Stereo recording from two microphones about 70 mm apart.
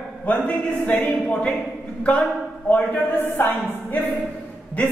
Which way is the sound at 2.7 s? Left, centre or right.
Left.